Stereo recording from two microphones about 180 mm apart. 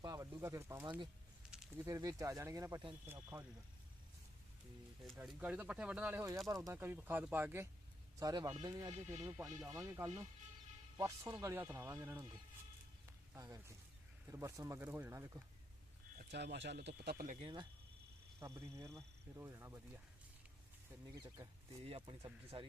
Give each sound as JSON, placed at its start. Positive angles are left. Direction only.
{"t": 0.0, "sound": "speech", "side_deg": -20}
{"t": 5.2, "sound": "speech", "side_deg": -5}
{"t": 8.9, "sound": "speech", "side_deg": -40}
{"t": 9.7, "sound": "speech", "side_deg": -15}
{"t": 13.3, "sound": "speech", "side_deg": -20}
{"t": 16.3, "sound": "speech", "side_deg": -70}
{"t": 17.4, "sound": "speech", "side_deg": -25}
{"t": 18.3, "sound": "speech", "side_deg": -15}
{"t": 21.2, "sound": "speech", "side_deg": -20}
{"t": 21.8, "sound": "speech", "side_deg": -35}